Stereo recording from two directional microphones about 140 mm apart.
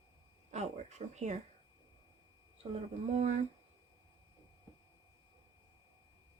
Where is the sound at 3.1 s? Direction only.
50° right (ahead or behind).